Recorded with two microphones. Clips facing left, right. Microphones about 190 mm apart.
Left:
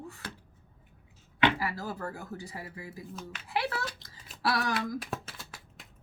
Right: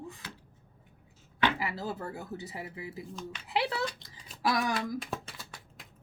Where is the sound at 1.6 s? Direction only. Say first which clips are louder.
Even; 20° right (ahead or behind).